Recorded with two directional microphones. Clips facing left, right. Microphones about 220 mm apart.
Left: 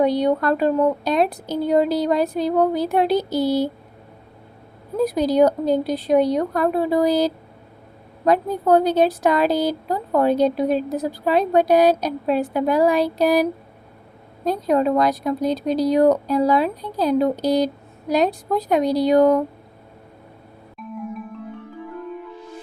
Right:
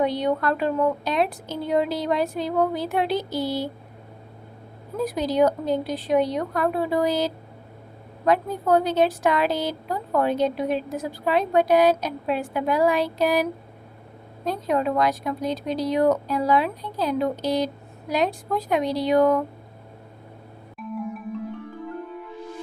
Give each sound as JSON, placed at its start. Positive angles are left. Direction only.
{"t": 0.0, "sound": "a woman's voice", "side_deg": 40}
{"t": 5.0, "sound": "a woman's voice", "side_deg": 40}